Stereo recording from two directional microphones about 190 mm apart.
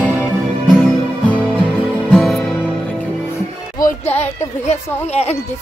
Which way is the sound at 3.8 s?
40° left (ahead or behind).